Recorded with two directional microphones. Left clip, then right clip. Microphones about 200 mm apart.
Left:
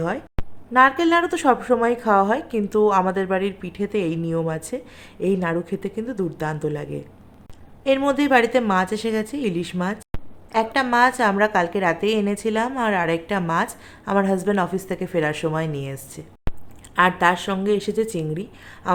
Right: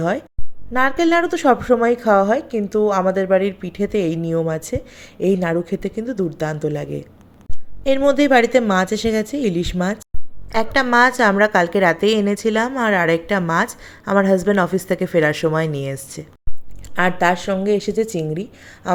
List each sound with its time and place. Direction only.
0.7 s a woman's voice: 15° right (ahead or behind)